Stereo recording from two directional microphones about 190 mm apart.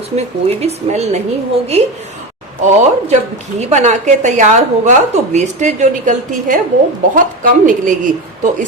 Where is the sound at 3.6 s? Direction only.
40° right (ahead or behind).